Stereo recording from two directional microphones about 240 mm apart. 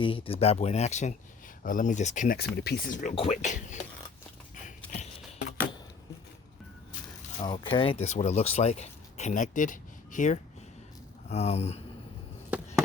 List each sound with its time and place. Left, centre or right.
0.0 s speech: left
4.5 s a sound: left
7.3 s speech: left